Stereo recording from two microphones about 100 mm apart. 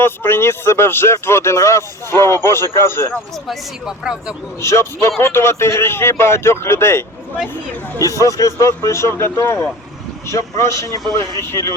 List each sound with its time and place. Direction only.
0.0 s speech: 20° left (ahead or behind)
3.4 s speech: centre (ahead or behind)
4.6 s speech: 30° left (ahead or behind)